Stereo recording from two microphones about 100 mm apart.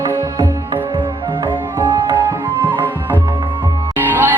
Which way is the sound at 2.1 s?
20° right (ahead or behind).